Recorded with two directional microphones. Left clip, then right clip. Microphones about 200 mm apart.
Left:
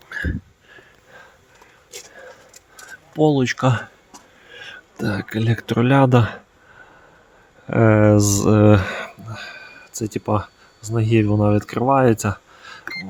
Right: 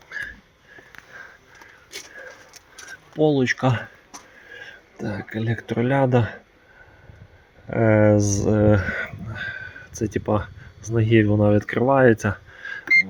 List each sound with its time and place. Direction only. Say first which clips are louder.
3.2 s speech: left 2 dB; 40° left (ahead or behind)
7.7 s speech: left 2 dB; 40° left (ahead or behind)
9.3 s a sound: right 3 dB; 20° left (ahead or behind)